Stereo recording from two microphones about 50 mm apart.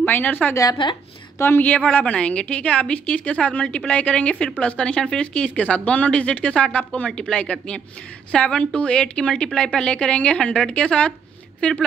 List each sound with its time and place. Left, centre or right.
0.2 s a woman's voice: left
1.6 s a woman's voice: left